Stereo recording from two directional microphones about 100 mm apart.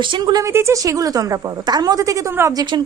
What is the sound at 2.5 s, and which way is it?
Speech, 50° right (ahead or behind).